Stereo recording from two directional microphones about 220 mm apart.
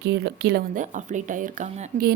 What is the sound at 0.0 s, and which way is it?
A woman's voice, 50° right (ahead or behind).